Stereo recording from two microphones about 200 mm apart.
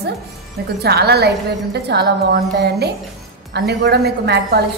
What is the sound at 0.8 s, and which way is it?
A woman's voice, 55° right (ahead or behind).